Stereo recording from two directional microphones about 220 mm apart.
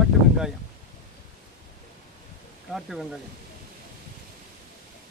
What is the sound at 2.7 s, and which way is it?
Speech, centre (ahead or behind).